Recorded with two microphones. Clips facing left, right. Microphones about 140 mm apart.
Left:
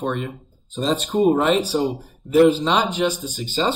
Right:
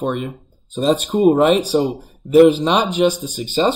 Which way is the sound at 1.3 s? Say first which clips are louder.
Right 4 dB; 15° right (ahead or behind).